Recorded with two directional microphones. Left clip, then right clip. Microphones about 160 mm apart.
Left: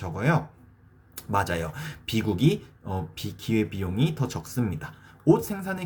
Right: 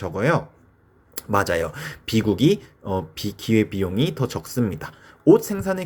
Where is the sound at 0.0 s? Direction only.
30° right (ahead or behind).